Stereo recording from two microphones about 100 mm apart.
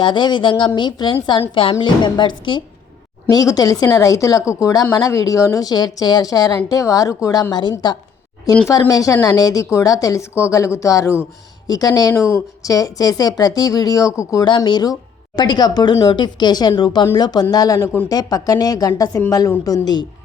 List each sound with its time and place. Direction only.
0.0 s speech: 50° left (ahead or behind)
1.3 s a woman's voice: 65° left (ahead or behind)
1.8 s speech: 50° left (ahead or behind)
3.2 s speech: 40° left (ahead or behind)
7.5 s speech: 50° left (ahead or behind); by 14.4 s 35° left (ahead or behind)
14.4 s speech: 50° left (ahead or behind)